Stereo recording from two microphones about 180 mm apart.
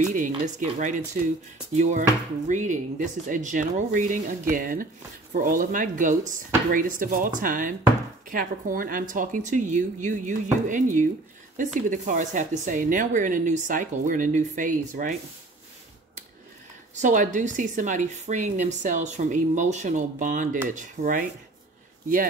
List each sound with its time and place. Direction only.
0.0 s speech: 45° right (ahead or behind)
17.0 s speech: 45° right (ahead or behind)